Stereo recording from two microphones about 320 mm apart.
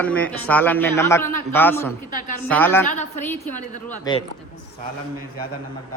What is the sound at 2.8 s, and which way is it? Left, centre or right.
A woman's voice, left.